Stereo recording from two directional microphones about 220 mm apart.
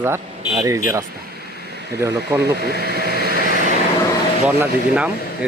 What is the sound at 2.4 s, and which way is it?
Speech, 45° right (ahead or behind).